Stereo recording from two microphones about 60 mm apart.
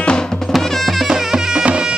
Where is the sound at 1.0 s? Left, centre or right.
Centre.